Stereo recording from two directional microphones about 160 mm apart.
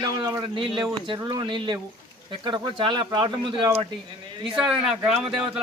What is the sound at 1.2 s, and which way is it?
Speech, 30° right (ahead or behind).